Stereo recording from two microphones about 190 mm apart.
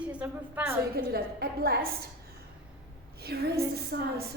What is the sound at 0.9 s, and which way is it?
Speech, 55° right (ahead or behind).